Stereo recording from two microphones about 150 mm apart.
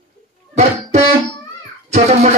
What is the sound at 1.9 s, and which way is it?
Speech, 50° right (ahead or behind).